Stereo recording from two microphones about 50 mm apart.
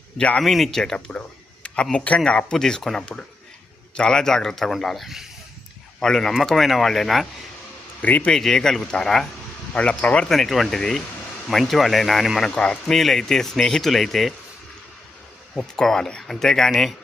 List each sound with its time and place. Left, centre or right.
0.4 s speech: centre
0.8 s a man's voice: centre
5.0 s speech: centre
6.0 s speech: centre
8.0 s a man's voice: left
8.3 s speech: centre
9.7 s speech: left
10.2 s speech: centre
11.6 s speech: centre
12.5 s speech: centre
15.5 s speech: centre